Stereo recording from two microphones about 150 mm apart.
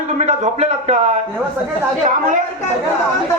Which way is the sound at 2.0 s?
55° right (ahead or behind).